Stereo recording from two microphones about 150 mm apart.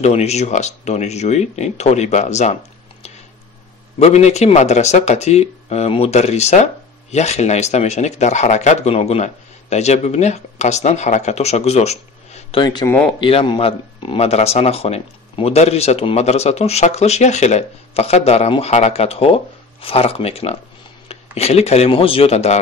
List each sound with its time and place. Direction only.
0.0 s speech: 45° left (ahead or behind)
4.0 s speech: 45° left (ahead or behind)
12.4 s speech: 30° left (ahead or behind)
12.8 s speech: 15° left (ahead or behind)
13.2 s speech: 35° left (ahead or behind)